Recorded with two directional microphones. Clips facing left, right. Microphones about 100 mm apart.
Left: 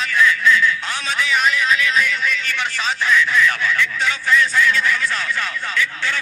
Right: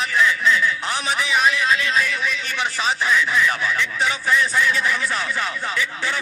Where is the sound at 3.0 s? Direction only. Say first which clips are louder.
Left 4 dB; 25° right (ahead or behind).